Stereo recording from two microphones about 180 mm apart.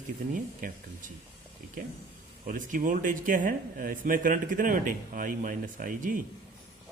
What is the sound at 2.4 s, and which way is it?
Speech, 45° right (ahead or behind).